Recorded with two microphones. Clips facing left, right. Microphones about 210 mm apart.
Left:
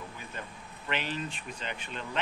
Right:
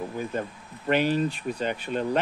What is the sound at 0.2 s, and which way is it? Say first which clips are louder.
Speech: right 12 dB; 45° right (ahead or behind).